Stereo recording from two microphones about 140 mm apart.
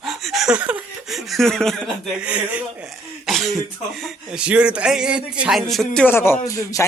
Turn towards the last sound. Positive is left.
turn(degrees=25)  # may be behind; listen again after turning